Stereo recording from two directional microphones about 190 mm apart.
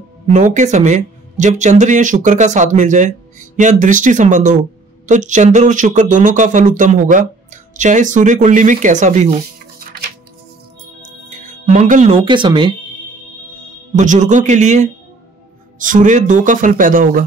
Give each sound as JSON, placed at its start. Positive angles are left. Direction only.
{"t": 0.3, "sound": "speech", "side_deg": -40}
{"t": 11.0, "sound": "music", "side_deg": -40}
{"t": 12.3, "sound": "speech", "side_deg": -25}
{"t": 13.9, "sound": "speech", "side_deg": -40}